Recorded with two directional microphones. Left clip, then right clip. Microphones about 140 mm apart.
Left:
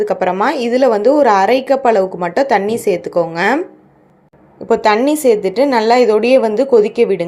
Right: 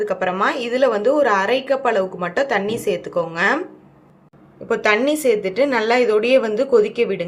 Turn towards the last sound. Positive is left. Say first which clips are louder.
# left 5 dB
turn(degrees=30)  # may be behind; listen again after turning